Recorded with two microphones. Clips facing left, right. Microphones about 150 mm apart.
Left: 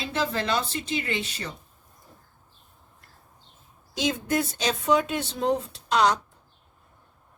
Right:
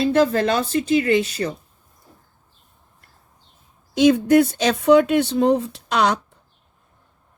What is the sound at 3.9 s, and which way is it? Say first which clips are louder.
Speech: right 12 dB; 60° right (ahead or behind).